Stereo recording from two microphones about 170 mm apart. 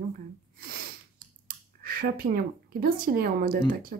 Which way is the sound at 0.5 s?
60° right (ahead or behind).